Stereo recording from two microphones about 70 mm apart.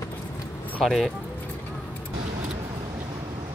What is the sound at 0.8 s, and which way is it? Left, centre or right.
Speech, centre.